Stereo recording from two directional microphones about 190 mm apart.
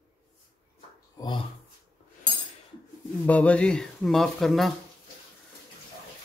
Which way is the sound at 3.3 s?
5° left (ahead or behind).